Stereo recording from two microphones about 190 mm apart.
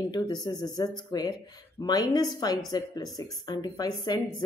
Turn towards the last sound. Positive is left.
turn(degrees=20)  # may be behind; listen again after turning